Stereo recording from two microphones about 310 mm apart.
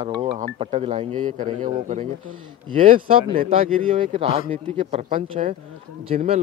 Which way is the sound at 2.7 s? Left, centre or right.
Right.